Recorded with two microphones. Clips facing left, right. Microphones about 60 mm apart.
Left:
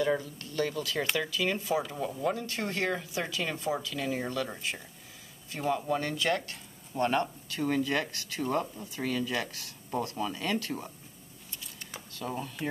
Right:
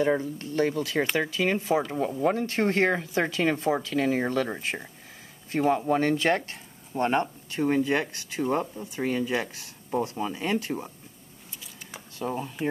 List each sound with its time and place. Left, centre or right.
0.0 s speech: right
12.2 s speech: right